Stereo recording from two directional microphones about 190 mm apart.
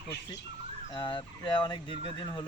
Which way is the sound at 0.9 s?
25° left (ahead or behind).